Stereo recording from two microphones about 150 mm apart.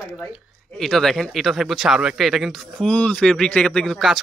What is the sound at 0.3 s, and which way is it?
Speech, centre (ahead or behind).